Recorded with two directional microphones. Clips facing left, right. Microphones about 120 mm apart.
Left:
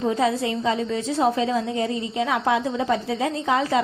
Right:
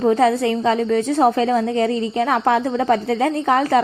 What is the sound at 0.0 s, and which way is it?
A woman's voice, 55° right (ahead or behind).